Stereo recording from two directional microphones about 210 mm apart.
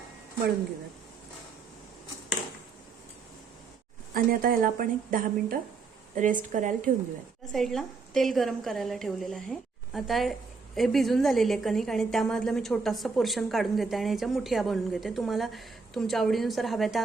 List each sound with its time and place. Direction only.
4.1 s a woman's voice: 40° right (ahead or behind)
7.5 s a woman's voice: centre (ahead or behind)